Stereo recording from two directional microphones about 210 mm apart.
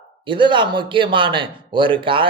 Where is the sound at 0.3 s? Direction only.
25° right (ahead or behind).